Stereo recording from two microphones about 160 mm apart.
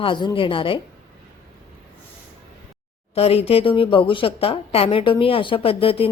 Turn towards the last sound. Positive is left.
turn(degrees=35)  # may be behind; listen again after turning